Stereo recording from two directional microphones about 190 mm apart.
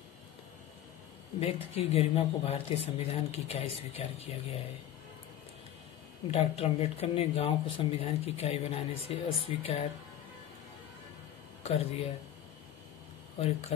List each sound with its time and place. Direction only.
1.4 s speech: 30° left (ahead or behind)
6.3 s speech: 30° left (ahead or behind)
11.6 s speech: 30° left (ahead or behind)
13.4 s speech: 35° left (ahead or behind)